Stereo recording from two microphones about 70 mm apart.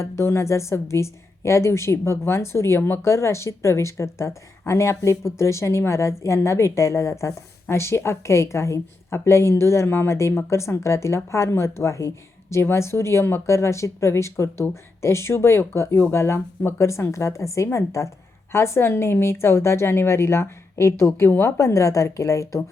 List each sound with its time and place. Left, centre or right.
0.0 s a woman's voice: left
21.2 s a woman's voice: left
21.4 s a woman's voice: left